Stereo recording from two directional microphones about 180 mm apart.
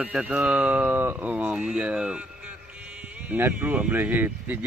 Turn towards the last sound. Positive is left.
turn(degrees=-10)  # may be behind; listen again after turning